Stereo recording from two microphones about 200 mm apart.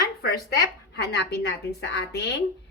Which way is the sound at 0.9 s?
55° left (ahead or behind).